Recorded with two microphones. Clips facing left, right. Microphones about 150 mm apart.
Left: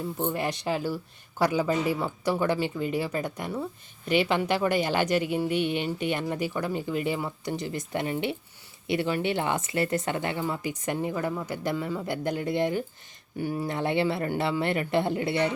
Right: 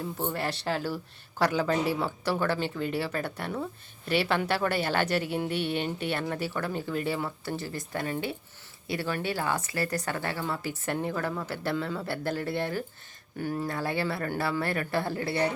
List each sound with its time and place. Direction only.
0.3 s speech: 15° left (ahead or behind)